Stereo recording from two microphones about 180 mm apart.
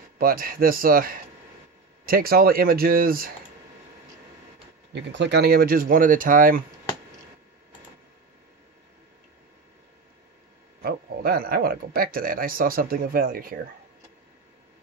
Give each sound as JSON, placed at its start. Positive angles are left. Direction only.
{"t": 0.2, "sound": "speech", "side_deg": -55}
{"t": 4.9, "sound": "speech", "side_deg": -80}
{"t": 10.8, "sound": "speech", "side_deg": -55}